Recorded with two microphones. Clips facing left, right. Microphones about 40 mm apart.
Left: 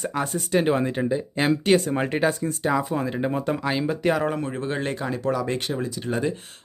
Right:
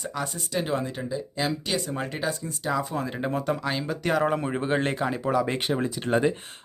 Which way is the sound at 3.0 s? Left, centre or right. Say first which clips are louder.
Left 3 dB; centre.